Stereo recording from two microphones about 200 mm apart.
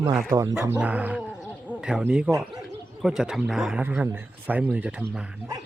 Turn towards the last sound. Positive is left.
turn(degrees=-5)  # may be behind; listen again after turning